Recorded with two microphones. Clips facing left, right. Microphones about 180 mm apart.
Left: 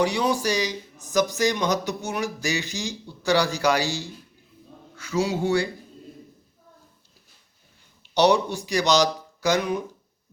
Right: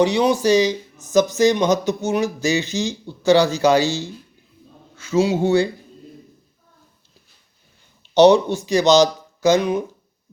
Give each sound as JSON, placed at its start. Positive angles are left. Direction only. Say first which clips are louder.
{"t": 0.0, "sound": "speech", "louder": "right 6 dB", "side_deg": -20}
{"t": 8.1, "sound": "speech", "louder": "right 7 dB", "side_deg": -25}